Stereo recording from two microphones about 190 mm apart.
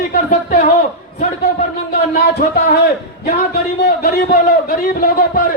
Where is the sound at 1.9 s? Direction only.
55° left (ahead or behind).